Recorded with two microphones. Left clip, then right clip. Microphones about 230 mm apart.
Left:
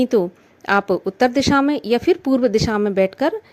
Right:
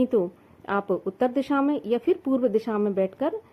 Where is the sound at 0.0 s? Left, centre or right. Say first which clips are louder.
Left 6 dB; left.